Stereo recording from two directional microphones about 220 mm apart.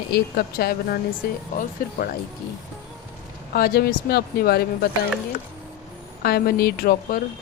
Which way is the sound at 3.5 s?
45° left (ahead or behind).